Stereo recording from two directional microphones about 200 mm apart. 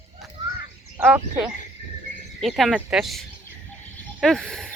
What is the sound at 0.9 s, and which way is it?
Speech, 5° right (ahead or behind).